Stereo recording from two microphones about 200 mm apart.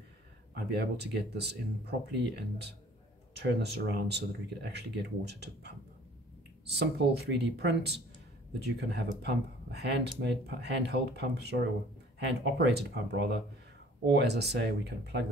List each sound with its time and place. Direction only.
0.7 s speech: 55° right (ahead or behind)
6.6 s speech: 55° right (ahead or behind)